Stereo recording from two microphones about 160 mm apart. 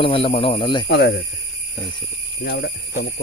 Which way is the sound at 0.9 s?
90° left.